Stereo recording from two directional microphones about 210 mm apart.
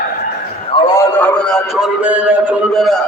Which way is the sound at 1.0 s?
5° left (ahead or behind).